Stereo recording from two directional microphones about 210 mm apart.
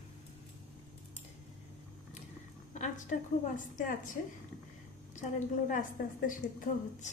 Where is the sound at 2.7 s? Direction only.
35° left (ahead or behind).